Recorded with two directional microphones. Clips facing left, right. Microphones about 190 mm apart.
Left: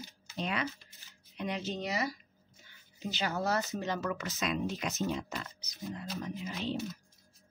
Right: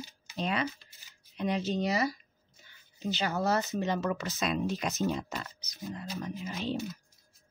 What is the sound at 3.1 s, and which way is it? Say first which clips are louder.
Speech: right 3 dB; 30° right (ahead or behind).